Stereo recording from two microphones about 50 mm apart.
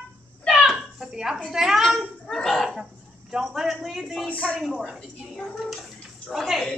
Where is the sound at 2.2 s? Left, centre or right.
Centre.